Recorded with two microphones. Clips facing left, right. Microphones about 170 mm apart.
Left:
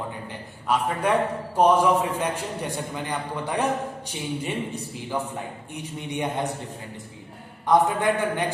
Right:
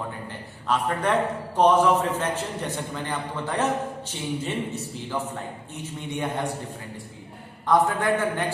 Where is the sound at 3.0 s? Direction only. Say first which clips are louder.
Left 1 dB; 15° left (ahead or behind).